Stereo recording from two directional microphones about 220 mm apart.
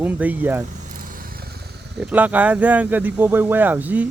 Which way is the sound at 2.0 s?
5° right (ahead or behind).